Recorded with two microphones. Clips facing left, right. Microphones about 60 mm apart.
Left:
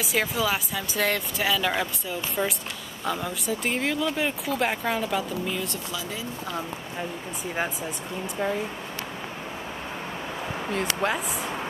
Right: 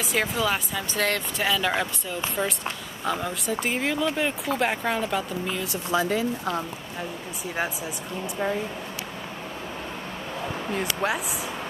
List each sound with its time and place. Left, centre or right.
0.0 s speech: centre
6.0 s speech: right
7.5 s speech: centre
10.7 s speech: centre